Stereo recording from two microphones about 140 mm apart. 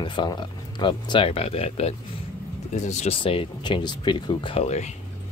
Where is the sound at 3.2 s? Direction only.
35° left (ahead or behind).